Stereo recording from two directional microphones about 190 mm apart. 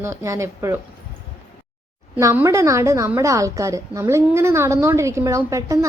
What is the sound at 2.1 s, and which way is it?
A woman's voice, 10° right (ahead or behind).